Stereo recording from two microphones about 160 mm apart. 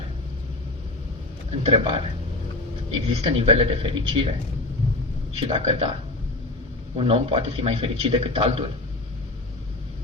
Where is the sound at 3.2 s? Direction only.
35° right (ahead or behind).